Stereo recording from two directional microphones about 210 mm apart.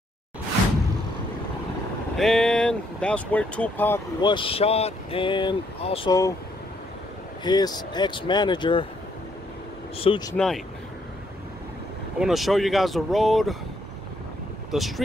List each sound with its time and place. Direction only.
2.1 s speech: centre (ahead or behind)
4.2 s speech: 20° left (ahead or behind)
7.4 s speech: 20° left (ahead or behind)
9.9 s speech: 25° left (ahead or behind)
10.3 s speech: centre (ahead or behind)
12.2 s speech: centre (ahead or behind)
14.7 s speech: centre (ahead or behind)